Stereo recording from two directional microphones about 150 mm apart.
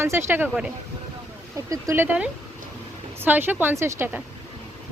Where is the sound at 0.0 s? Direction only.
15° right (ahead or behind).